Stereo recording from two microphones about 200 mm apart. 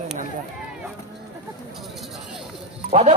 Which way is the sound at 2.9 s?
30° right (ahead or behind).